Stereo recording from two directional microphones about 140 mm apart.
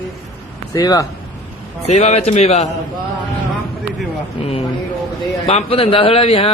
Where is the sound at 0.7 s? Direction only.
25° left (ahead or behind).